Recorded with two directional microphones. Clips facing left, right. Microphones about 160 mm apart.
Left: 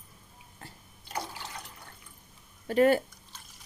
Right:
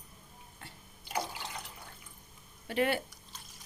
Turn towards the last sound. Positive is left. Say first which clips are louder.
# left 8 dB
turn(degrees=40)  # may be behind; listen again after turning